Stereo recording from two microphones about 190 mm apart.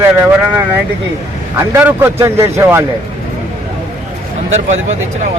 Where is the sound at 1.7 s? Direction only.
10° right (ahead or behind).